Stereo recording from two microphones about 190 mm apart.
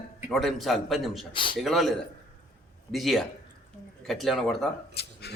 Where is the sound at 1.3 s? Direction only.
25° left (ahead or behind).